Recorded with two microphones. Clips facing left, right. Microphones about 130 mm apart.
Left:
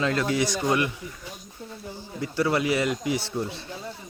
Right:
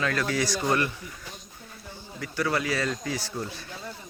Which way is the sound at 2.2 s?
25° left (ahead or behind).